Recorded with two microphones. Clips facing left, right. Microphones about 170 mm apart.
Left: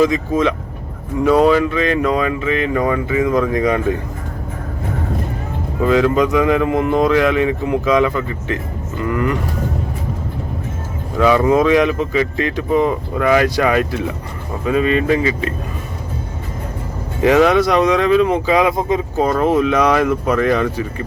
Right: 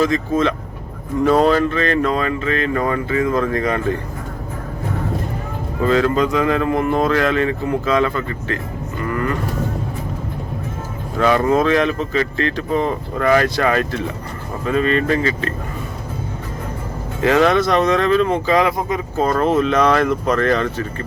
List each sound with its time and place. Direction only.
0.0 s speech: 15° left (ahead or behind)
5.8 s speech: 15° left (ahead or behind)
11.2 s speech: 10° left (ahead or behind)
17.2 s speech: 15° left (ahead or behind)
18.8 s speech: 20° left (ahead or behind)